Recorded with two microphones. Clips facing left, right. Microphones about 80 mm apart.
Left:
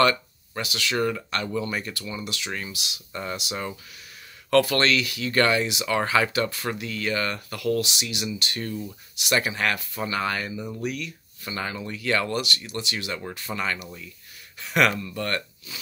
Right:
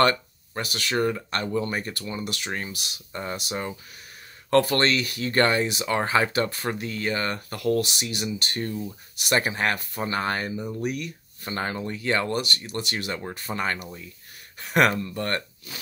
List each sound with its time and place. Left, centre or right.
0.0 s speech: right
3.1 s speech: right
4.5 s speech: right
10.6 s speech: centre
10.9 s speech: right
15.7 s snort: right